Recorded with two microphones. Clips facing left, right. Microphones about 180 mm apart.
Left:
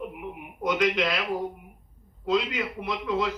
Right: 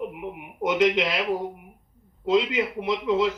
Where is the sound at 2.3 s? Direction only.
25° right (ahead or behind).